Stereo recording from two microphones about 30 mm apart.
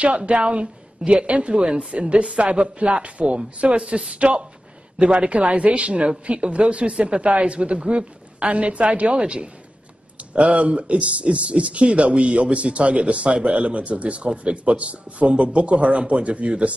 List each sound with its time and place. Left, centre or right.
0.3 s a woman's voice: right
1.5 s speech: right